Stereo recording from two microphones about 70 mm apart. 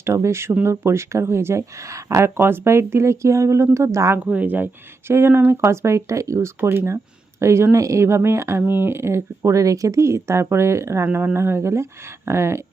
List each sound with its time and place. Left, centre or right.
0.0 s speech: right
4.2 s speech: right
6.6 s speech: right